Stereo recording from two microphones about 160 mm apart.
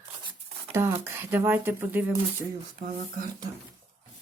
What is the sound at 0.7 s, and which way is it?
Speech, 15° right (ahead or behind).